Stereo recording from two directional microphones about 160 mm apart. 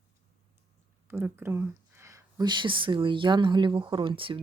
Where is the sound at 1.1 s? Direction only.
10° right (ahead or behind).